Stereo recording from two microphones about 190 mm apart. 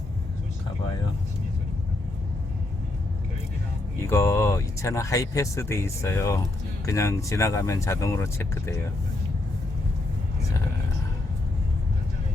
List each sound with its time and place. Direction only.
4.0 s speech: 15° left (ahead or behind)